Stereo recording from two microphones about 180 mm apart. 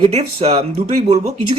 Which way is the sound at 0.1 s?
35° right (ahead or behind).